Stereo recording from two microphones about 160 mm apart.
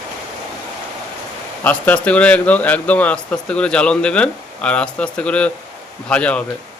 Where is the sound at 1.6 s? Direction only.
10° left (ahead or behind).